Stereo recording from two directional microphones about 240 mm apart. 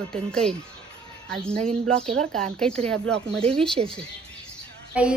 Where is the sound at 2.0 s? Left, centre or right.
Right.